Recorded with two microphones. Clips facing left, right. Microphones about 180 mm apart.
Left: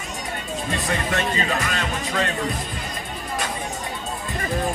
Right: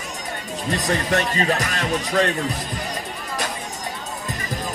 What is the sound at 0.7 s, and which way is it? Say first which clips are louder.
Speech: right 4 dB; 40° right (ahead or behind).